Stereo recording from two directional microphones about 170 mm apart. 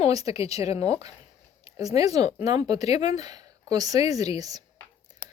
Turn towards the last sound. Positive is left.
turn(degrees=-20)  # may be behind; listen again after turning